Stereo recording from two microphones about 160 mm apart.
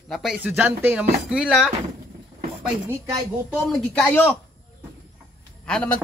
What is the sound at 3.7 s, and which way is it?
Speech, 10° left (ahead or behind).